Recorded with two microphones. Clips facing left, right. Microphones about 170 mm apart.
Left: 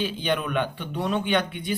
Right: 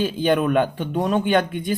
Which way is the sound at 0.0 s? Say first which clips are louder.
Right 7 dB; 45° right (ahead or behind).